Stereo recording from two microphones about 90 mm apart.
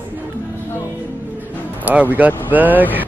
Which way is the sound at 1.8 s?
20° right (ahead or behind).